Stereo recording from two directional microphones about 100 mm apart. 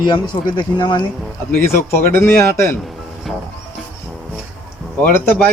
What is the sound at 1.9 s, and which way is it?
Speech, 25° left (ahead or behind).